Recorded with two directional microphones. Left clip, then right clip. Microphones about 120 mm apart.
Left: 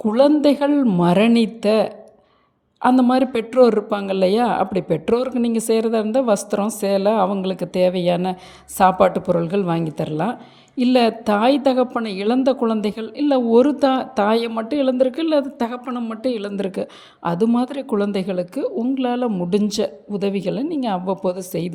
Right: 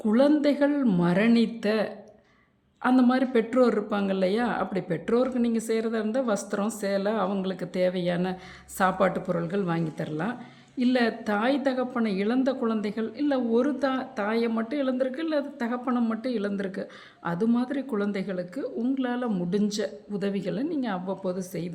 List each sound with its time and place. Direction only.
0.0 s speech: 35° left (ahead or behind); by 14.5 s 55° left (ahead or behind)
14.7 s speech: 40° left (ahead or behind)
19.5 s speech: 45° left (ahead or behind)